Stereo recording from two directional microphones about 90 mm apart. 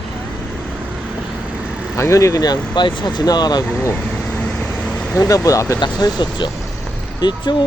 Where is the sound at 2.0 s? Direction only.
35° left (ahead or behind).